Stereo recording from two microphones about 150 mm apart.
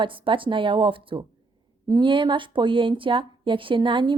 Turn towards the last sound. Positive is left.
turn(degrees=-35)  # may be behind; listen again after turning